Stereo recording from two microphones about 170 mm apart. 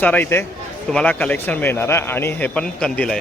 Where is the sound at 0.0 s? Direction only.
10° left (ahead or behind).